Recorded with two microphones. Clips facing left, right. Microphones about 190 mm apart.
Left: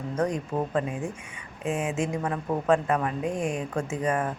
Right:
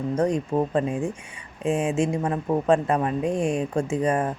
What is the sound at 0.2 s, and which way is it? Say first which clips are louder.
Speech: right 3 dB; 25° right (ahead or behind).